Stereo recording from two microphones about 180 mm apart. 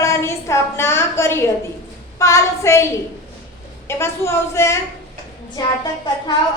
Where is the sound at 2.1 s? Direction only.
15° left (ahead or behind).